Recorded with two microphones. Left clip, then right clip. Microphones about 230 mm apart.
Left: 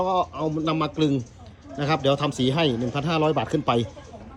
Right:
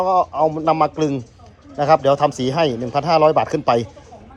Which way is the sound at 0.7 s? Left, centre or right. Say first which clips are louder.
Right 8 dB; right.